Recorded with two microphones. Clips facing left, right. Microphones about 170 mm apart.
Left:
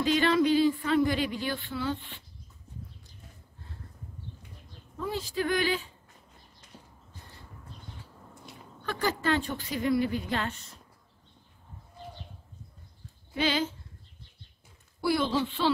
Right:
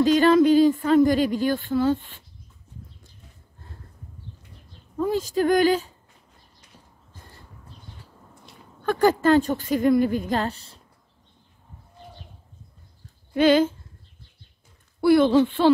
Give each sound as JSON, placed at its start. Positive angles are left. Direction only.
{"t": 0.0, "sound": "speech", "side_deg": -45}
{"t": 4.9, "sound": "speech", "side_deg": -45}
{"t": 8.8, "sound": "speech", "side_deg": -50}
{"t": 13.3, "sound": "speech", "side_deg": -50}
{"t": 15.0, "sound": "speech", "side_deg": -55}